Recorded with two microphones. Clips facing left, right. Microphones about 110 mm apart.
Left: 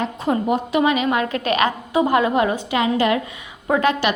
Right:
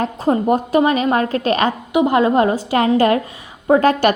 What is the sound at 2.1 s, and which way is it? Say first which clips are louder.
A woman's voice: right 5 dB; 35° right (ahead or behind).